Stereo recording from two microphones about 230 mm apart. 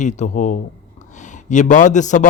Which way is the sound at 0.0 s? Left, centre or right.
Left.